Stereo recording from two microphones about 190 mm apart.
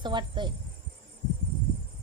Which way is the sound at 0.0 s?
25° right (ahead or behind).